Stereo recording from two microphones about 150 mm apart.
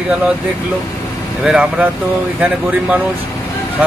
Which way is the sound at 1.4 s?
5° right (ahead or behind).